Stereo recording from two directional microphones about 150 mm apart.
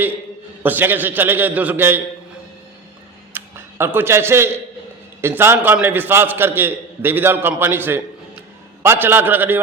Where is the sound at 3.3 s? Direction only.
15° right (ahead or behind).